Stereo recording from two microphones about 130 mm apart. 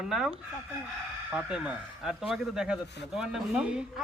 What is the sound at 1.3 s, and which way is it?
Speech, 5° right (ahead or behind).